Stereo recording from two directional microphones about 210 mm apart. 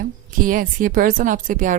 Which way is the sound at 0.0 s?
40° right (ahead or behind).